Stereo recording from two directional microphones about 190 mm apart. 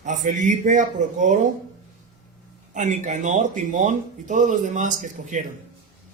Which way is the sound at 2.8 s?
40° right (ahead or behind).